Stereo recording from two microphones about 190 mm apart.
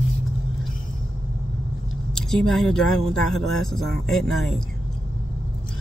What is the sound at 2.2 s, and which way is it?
Speech, centre (ahead or behind).